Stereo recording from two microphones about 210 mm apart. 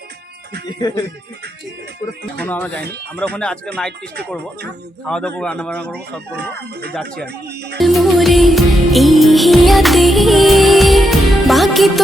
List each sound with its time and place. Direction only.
0.7 s speech: 20° left (ahead or behind)
2.4 s speech: 5° left (ahead or behind)
5.0 s speech: 5° left (ahead or behind)
7.8 s music: centre (ahead or behind)